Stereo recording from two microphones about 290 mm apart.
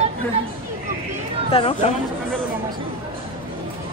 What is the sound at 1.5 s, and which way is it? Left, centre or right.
Speech, left.